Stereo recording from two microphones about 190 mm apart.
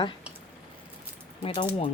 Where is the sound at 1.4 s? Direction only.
25° left (ahead or behind).